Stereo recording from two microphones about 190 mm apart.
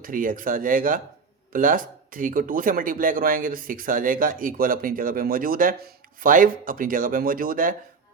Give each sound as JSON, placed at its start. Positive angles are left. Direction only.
{"t": 0.0, "sound": "speech", "side_deg": -45}